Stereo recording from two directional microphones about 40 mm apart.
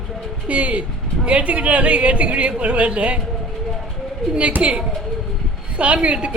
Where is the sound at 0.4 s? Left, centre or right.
Right.